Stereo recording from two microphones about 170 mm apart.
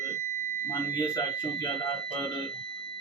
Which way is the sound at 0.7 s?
25° left (ahead or behind).